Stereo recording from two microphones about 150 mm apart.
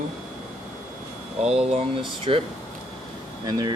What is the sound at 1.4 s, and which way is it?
Speech, 40° right (ahead or behind).